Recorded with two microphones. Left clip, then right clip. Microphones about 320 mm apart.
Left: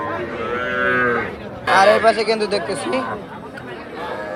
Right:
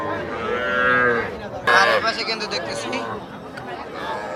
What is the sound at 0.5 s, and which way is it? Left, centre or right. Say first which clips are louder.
Livestock: right 1 dB; right.